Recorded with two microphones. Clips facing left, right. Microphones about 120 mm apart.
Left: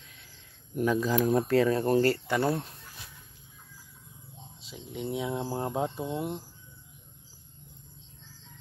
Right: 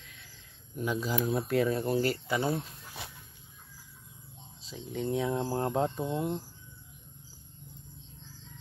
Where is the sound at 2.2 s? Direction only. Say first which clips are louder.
Left 3 dB; 70° left (ahead or behind).